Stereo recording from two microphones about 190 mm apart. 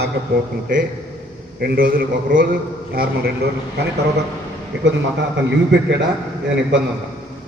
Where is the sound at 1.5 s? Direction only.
55° right (ahead or behind).